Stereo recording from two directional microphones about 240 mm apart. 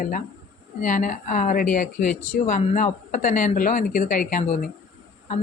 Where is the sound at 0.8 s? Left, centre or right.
Left.